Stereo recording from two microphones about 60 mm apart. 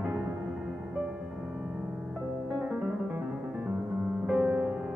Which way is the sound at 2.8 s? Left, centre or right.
Right.